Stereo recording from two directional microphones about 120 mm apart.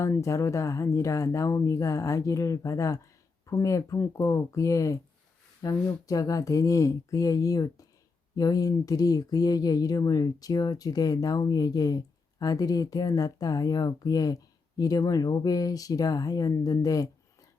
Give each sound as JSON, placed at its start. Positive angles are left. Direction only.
{"t": 0.0, "sound": "speech", "side_deg": 25}